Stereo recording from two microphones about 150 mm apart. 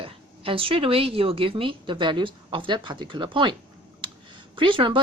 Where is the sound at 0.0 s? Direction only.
35° right (ahead or behind).